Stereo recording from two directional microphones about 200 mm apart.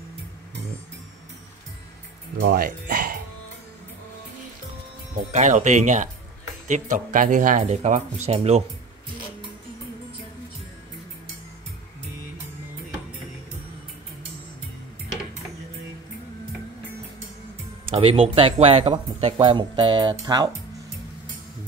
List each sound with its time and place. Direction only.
2.4 s speech: 45° right (ahead or behind)
5.1 s speech: 35° right (ahead or behind)
17.8 s speech: 25° right (ahead or behind)